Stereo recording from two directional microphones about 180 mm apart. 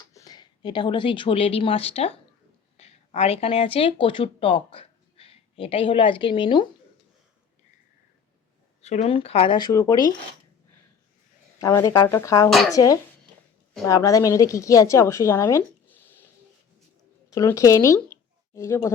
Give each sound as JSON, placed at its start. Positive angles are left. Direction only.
{"t": 0.0, "sound": "speech", "side_deg": 20}
{"t": 8.8, "sound": "speech", "side_deg": 35}
{"t": 11.6, "sound": "a woman's voice", "side_deg": 15}
{"t": 12.5, "sound": "speech", "side_deg": 0}
{"t": 12.7, "sound": "a woman's voice", "side_deg": 20}
{"t": 17.3, "sound": "speech", "side_deg": 15}